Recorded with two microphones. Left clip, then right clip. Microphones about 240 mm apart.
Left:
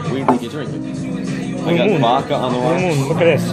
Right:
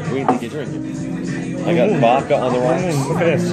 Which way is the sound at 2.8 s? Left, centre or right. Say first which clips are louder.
Left 3 dB; centre.